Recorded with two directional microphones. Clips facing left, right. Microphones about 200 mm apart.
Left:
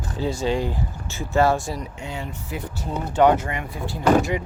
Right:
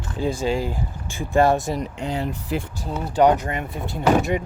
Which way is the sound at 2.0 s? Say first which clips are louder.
Right 6 dB; 35° right (ahead or behind).